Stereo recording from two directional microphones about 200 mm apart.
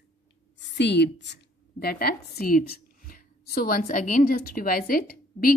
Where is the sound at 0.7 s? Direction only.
60° left (ahead or behind).